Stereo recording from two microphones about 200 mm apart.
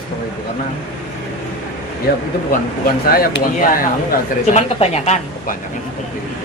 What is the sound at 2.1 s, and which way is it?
Speech, 50° left (ahead or behind).